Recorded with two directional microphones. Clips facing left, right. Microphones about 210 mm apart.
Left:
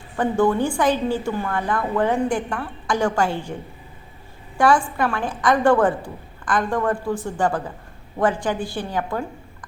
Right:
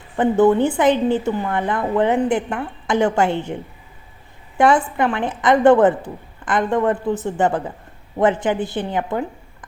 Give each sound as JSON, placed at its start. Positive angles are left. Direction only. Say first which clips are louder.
{"t": 0.2, "sound": "a woman's voice", "louder": "right 5 dB", "side_deg": -20}